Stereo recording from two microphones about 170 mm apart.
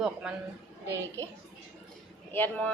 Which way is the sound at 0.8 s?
15° right (ahead or behind).